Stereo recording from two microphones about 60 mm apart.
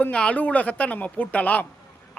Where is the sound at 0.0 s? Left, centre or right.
Centre.